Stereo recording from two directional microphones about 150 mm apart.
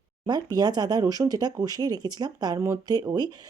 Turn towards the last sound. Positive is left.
turn(degrees=-25)  # may be behind; listen again after turning